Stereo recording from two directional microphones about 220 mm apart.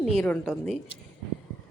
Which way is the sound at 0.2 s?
Centre (ahead or behind).